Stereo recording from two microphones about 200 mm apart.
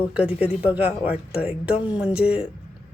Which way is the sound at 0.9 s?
5° right (ahead or behind).